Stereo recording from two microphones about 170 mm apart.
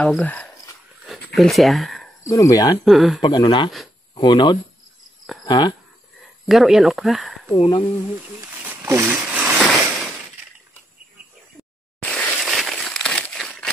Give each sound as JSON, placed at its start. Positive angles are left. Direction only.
{"t": 0.0, "sound": "speech", "side_deg": 10}
{"t": 1.0, "sound": "a sound", "side_deg": 0}
{"t": 2.2, "sound": "speech", "side_deg": 20}
{"t": 2.8, "sound": "speech", "side_deg": 0}
{"t": 3.2, "sound": "speech", "side_deg": 25}
{"t": 6.4, "sound": "speech", "side_deg": 0}
{"t": 7.5, "sound": "speech", "side_deg": 30}
{"t": 8.6, "sound": "a sound", "side_deg": -15}
{"t": 12.0, "sound": "a sound", "side_deg": 0}